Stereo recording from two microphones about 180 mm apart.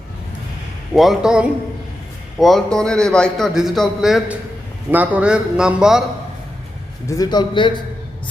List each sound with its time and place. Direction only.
0.9 s a man's voice: centre (ahead or behind)
7.1 s a man's voice: 20° left (ahead or behind)